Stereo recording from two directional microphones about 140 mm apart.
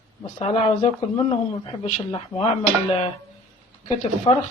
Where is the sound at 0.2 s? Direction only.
45° left (ahead or behind).